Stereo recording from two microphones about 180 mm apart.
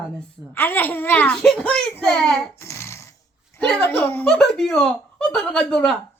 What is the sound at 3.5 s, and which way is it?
Speech, 5° left (ahead or behind).